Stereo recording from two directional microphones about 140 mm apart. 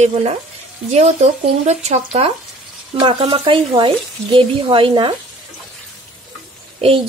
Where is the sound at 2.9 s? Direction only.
35° right (ahead or behind).